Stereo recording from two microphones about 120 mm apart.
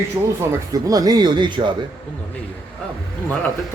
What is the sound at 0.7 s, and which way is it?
A man's voice, 30° right (ahead or behind).